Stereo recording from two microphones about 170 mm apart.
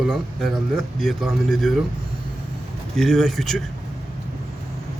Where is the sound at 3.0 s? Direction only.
Centre (ahead or behind).